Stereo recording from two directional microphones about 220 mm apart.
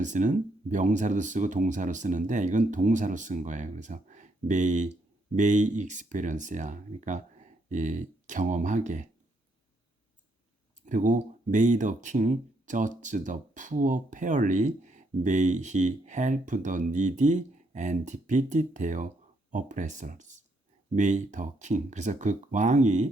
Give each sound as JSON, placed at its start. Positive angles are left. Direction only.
{"t": 0.0, "sound": "speech", "side_deg": -35}
{"t": 10.8, "sound": "speech", "side_deg": -35}